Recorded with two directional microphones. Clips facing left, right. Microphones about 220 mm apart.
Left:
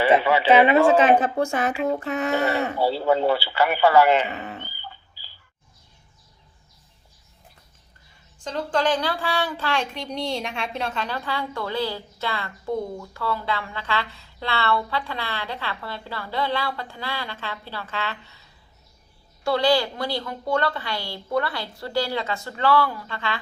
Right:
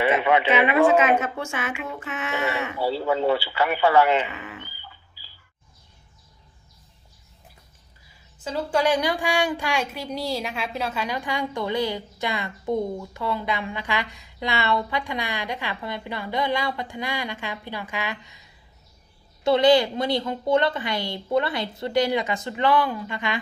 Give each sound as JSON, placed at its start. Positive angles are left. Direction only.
{"t": 0.1, "sound": "a woman's voice", "side_deg": 30}
{"t": 8.4, "sound": "speech", "side_deg": -10}
{"t": 19.5, "sound": "a woman's voice", "side_deg": -20}